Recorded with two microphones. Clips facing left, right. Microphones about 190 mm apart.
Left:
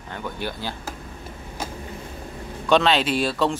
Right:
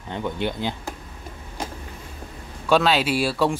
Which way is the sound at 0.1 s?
20° right (ahead or behind).